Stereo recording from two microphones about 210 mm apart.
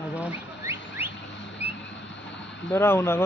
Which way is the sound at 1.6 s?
30° left (ahead or behind).